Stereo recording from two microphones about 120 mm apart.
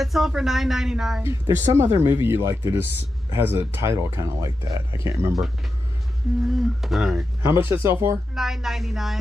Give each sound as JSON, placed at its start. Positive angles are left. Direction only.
{"t": 0.0, "sound": "speech", "side_deg": 0}
{"t": 1.2, "sound": "speech", "side_deg": -25}
{"t": 6.5, "sound": "speech", "side_deg": 0}
{"t": 7.4, "sound": "speech", "side_deg": -20}
{"t": 8.4, "sound": "speech", "side_deg": 0}